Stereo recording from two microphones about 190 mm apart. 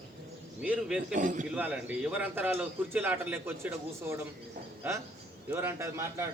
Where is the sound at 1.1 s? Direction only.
45° right (ahead or behind).